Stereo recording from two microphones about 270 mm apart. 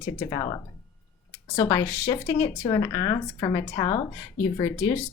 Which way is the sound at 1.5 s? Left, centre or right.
Centre.